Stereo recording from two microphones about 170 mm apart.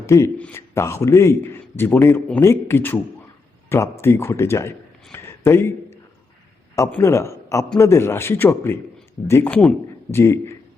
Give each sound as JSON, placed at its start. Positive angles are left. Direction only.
{"t": 0.0, "sound": "a man's voice", "side_deg": 15}
{"t": 6.7, "sound": "a man's voice", "side_deg": 15}